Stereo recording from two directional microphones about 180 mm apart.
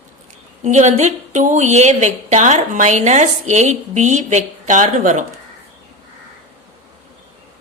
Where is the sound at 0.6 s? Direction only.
40° right (ahead or behind).